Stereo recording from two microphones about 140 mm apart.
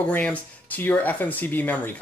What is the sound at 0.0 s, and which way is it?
Speech, 10° left (ahead or behind).